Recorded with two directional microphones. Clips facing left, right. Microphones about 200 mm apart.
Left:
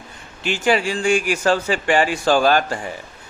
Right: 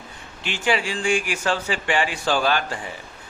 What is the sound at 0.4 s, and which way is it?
Mantra, 45° left (ahead or behind).